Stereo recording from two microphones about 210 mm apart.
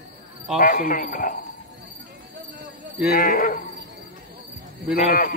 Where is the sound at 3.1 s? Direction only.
40° left (ahead or behind).